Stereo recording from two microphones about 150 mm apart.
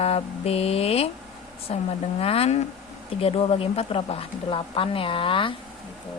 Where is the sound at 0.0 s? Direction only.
40° left (ahead or behind).